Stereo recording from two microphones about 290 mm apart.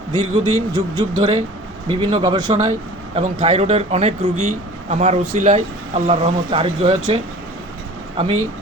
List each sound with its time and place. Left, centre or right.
0.1 s a man's voice: centre